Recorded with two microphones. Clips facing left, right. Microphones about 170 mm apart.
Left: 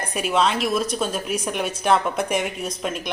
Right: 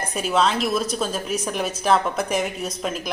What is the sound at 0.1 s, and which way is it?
A woman's voice, centre (ahead or behind).